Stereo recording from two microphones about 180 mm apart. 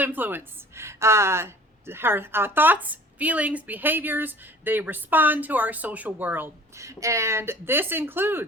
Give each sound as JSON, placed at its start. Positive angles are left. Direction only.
{"t": 0.0, "sound": "a woman's voice", "side_deg": -10}